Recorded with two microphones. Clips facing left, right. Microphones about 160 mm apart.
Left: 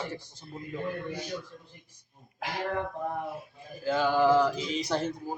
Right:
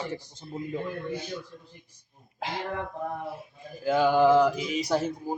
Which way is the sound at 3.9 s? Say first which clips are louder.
Right 3 dB; 15° right (ahead or behind).